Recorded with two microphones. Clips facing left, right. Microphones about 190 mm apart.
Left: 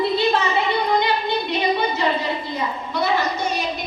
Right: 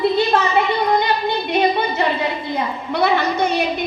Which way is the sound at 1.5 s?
55° right (ahead or behind).